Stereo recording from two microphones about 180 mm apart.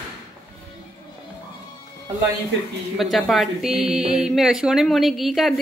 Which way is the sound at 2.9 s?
Centre (ahead or behind).